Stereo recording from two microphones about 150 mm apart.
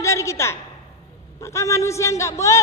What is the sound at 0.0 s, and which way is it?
A woman's voice, 20° left (ahead or behind).